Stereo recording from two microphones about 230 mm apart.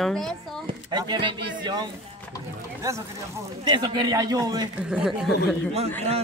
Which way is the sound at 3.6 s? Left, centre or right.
Centre.